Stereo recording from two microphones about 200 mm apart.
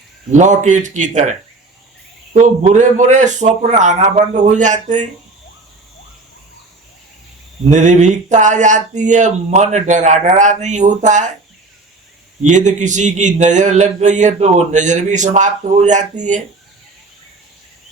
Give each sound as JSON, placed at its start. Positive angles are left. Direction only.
{"t": 0.3, "sound": "speech", "side_deg": -35}
{"t": 7.7, "sound": "speech", "side_deg": -35}
{"t": 12.4, "sound": "speech", "side_deg": -35}